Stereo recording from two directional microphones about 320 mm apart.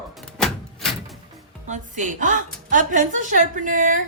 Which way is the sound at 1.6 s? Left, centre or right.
Right.